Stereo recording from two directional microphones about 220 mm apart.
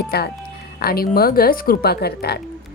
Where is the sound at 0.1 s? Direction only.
45° left (ahead or behind).